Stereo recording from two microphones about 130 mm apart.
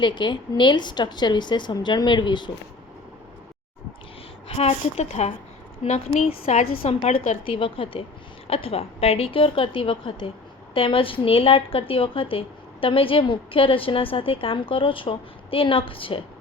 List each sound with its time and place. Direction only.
0.0 s a woman's voice: 35° left (ahead or behind)
4.4 s a woman's voice: 50° left (ahead or behind)